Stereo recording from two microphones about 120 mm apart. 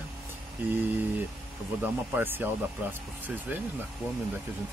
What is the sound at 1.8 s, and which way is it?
Speech, 15° right (ahead or behind).